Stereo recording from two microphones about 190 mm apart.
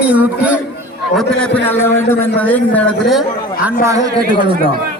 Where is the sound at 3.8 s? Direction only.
15° right (ahead or behind).